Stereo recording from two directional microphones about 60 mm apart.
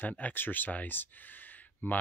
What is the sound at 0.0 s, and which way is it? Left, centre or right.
Speech, left.